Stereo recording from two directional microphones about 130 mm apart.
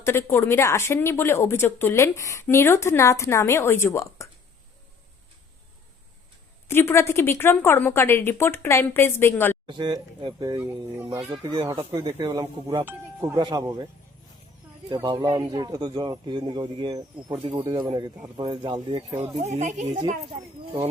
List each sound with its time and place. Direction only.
0.0 s speech: 20° left (ahead or behind)
6.7 s speech: 20° left (ahead or behind)
9.6 s speech: 35° right (ahead or behind)
10.6 s speech: 20° right (ahead or behind)
11.3 s speech: 35° right (ahead or behind)
14.8 s speech: 35° right (ahead or behind)
19.4 s speech: 60° right (ahead or behind)
19.9 s speech: 40° right (ahead or behind)